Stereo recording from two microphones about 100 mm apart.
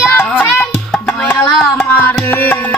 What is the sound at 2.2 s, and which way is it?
Speech, 20° left (ahead or behind).